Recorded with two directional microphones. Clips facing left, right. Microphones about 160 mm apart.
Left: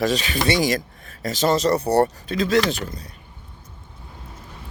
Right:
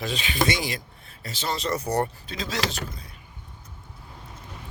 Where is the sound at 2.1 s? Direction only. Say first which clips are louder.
Left 12 dB; 55° left (ahead or behind).